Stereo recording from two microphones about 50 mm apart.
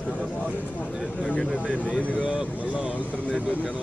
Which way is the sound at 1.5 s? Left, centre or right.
Right.